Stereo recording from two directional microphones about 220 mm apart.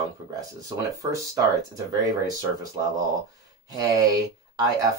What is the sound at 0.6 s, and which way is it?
Speech, 15° right (ahead or behind).